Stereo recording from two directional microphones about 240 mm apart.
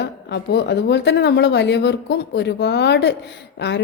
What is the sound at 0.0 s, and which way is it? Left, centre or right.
Speech, left.